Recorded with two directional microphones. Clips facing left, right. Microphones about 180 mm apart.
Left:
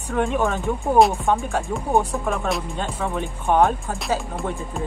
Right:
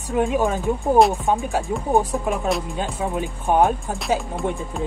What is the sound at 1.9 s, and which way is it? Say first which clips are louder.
Music: right 1 dB; 15° right (ahead or behind).